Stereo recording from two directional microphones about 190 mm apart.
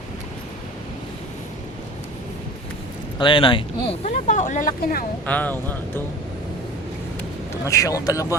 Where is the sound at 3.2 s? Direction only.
25° left (ahead or behind).